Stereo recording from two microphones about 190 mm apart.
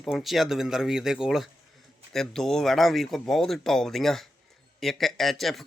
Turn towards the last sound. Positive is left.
turn(degrees=0)  # may be behind; listen again after turning